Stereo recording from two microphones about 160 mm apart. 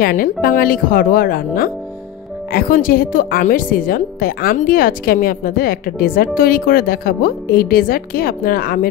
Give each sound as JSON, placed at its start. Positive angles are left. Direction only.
{"t": 0.0, "sound": "a woman's voice", "side_deg": 65}